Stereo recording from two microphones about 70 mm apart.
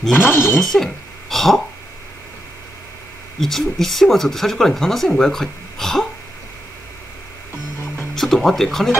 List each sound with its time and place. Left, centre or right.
0.1 s speech: left
0.6 s speech: centre
3.3 s speech: centre
8.1 s a sound: centre